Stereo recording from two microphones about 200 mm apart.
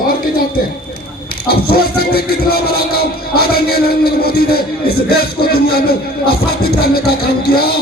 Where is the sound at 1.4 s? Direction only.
50° left (ahead or behind).